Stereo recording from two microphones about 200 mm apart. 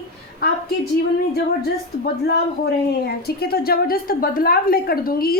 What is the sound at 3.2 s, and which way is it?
A woman's voice, 50° left (ahead or behind).